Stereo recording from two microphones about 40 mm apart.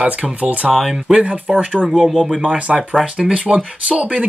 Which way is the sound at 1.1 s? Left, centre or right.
Right.